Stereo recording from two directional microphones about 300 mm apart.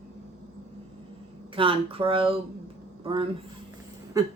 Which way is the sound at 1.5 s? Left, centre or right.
Centre.